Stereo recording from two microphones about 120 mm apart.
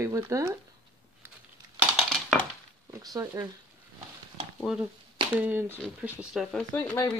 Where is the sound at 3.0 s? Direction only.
30° right (ahead or behind).